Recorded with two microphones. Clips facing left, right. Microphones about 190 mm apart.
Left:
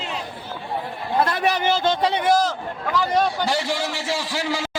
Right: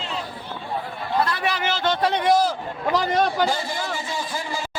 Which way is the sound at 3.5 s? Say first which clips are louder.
Left 3 dB; 80° left.